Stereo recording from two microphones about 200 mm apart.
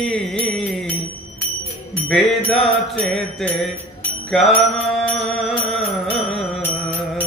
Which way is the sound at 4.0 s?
Centre (ahead or behind).